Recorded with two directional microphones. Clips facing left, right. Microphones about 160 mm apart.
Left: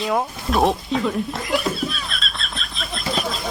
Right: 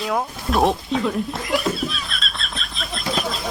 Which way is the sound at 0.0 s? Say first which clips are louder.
Left 1 dB; centre (ahead or behind).